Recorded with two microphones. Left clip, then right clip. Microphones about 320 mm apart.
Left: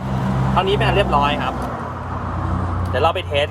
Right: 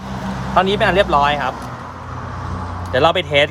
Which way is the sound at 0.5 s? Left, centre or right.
Right.